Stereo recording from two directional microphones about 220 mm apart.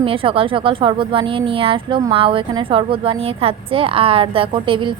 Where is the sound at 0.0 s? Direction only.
25° right (ahead or behind).